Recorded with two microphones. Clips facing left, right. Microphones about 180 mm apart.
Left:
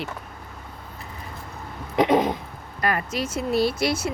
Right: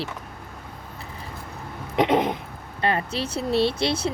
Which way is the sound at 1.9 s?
20° right (ahead or behind).